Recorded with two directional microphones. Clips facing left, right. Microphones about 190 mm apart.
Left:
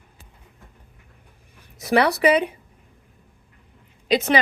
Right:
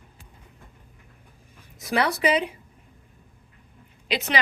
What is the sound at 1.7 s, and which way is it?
Speech, 70° left (ahead or behind).